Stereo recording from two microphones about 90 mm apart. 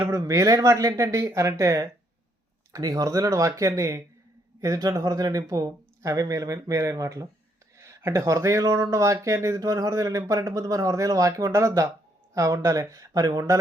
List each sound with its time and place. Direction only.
0.1 s speech: 35° right (ahead or behind)